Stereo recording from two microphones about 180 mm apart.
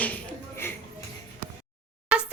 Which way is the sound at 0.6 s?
10° left (ahead or behind).